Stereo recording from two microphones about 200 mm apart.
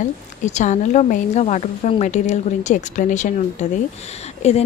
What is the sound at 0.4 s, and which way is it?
A woman's voice, 35° left (ahead or behind).